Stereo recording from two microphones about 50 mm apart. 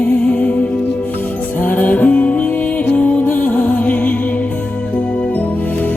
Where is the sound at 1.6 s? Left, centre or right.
Left.